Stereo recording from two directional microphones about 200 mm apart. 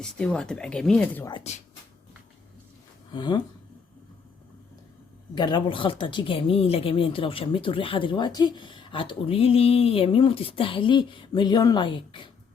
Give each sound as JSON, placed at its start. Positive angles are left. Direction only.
{"t": 0.0, "sound": "speech", "side_deg": 5}
{"t": 1.5, "sound": "speech", "side_deg": 35}
{"t": 3.1, "sound": "speech", "side_deg": 20}
{"t": 5.3, "sound": "speech", "side_deg": 20}